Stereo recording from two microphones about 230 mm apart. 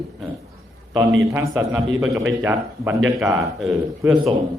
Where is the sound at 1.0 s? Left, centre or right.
Centre.